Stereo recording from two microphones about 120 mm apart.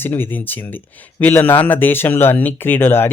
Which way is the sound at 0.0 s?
15° left (ahead or behind).